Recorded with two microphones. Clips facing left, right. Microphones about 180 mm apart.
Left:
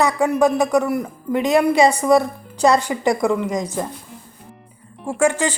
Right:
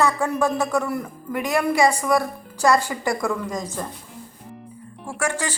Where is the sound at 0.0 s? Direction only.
15° left (ahead or behind).